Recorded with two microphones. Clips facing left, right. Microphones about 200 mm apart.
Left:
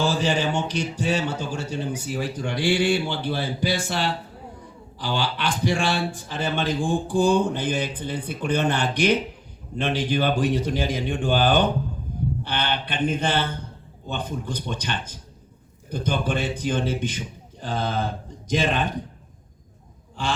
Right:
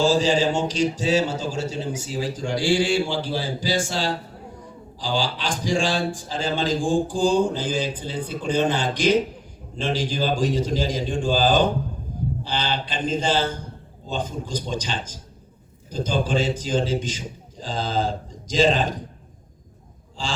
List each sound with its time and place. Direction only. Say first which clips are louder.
0.0 s a man's voice: right 4 dB; 60° left (ahead or behind)
20.2 s a man's voice: left 3 dB; 60° left (ahead or behind)